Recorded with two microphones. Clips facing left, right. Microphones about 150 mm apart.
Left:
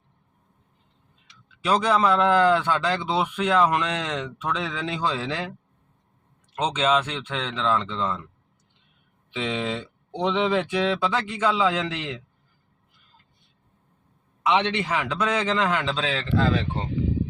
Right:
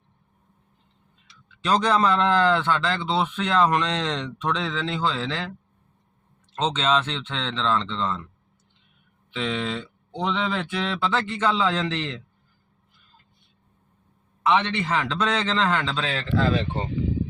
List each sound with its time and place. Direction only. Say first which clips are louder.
1.6 s a man's voice: even; 5° left (ahead or behind)
6.5 s a man's voice: left 1 dB; 10° left (ahead or behind)
9.3 s a man's voice: even; 15° left (ahead or behind)
14.4 s a man's voice: even; 15° left (ahead or behind)